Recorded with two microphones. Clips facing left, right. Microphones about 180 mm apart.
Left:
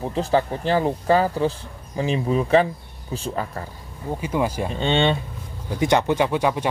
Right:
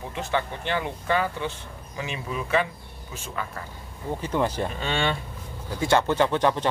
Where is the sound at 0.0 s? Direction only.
35° left (ahead or behind).